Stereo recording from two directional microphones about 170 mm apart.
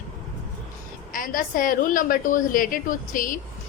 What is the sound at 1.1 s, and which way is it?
A woman's voice, 55° left (ahead or behind).